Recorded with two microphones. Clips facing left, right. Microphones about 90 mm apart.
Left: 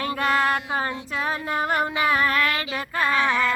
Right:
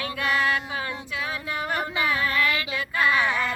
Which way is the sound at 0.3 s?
50° left (ahead or behind).